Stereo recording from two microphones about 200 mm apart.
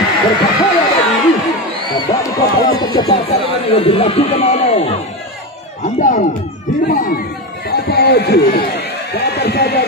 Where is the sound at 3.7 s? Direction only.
30° left (ahead or behind).